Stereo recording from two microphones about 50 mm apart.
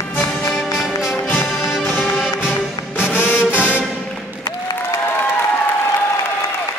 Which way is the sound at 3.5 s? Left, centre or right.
Left.